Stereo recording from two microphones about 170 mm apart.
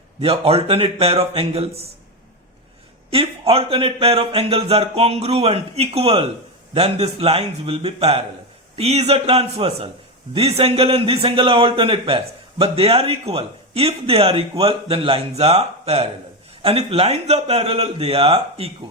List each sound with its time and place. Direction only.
0.2 s a man's voice: 35° right (ahead or behind)
3.1 s a man's voice: 35° right (ahead or behind)